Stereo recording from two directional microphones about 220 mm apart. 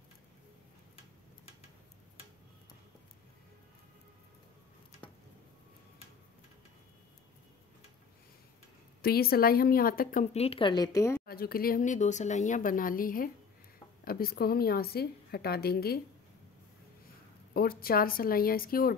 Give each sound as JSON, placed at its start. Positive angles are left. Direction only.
{"t": 9.0, "sound": "a woman's voice", "side_deg": 45}
{"t": 10.3, "sound": "a woman's voice", "side_deg": 25}
{"t": 11.2, "sound": "a woman's voice", "side_deg": 45}
{"t": 17.6, "sound": "a woman's voice", "side_deg": 45}